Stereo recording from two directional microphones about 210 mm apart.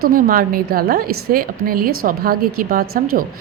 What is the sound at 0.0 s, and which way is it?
A woman's voice, 40° right (ahead or behind).